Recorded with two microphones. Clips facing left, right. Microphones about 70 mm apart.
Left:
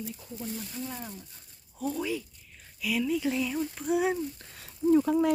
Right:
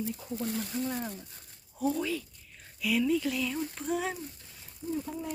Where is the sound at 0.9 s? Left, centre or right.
Centre.